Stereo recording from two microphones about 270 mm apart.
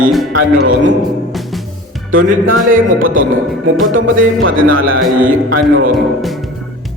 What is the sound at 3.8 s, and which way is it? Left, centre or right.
Music, right.